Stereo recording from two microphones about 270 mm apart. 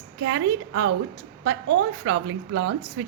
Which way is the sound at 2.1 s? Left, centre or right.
Right.